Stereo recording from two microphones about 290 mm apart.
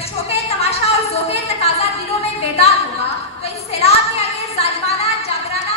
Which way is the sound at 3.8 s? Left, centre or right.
Left.